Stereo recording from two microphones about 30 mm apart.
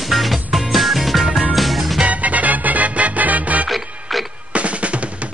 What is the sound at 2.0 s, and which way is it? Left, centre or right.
Music, right.